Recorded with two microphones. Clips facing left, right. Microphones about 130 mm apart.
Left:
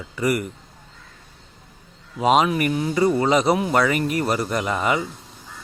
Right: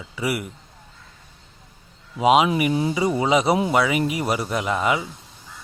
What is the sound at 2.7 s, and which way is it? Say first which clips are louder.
Speech: right 1 dB; 25° right (ahead or behind).